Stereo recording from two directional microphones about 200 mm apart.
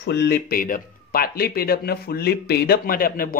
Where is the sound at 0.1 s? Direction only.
55° left (ahead or behind).